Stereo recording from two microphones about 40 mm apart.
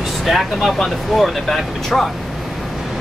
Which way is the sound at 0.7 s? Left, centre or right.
Centre.